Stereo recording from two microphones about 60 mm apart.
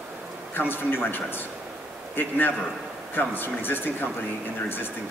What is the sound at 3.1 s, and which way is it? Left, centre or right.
Speech, left.